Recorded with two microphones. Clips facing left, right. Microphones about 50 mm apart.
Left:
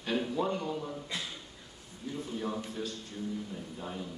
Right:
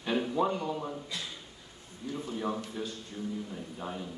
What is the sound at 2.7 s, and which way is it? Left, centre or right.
Speech, centre.